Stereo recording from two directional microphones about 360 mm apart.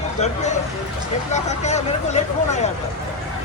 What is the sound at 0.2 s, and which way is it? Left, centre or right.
Speech, centre.